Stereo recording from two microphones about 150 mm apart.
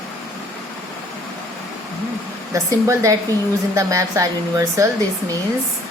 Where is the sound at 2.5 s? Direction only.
20° right (ahead or behind).